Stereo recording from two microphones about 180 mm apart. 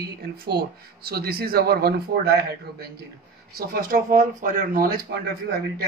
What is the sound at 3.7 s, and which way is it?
Speech, 50° right (ahead or behind).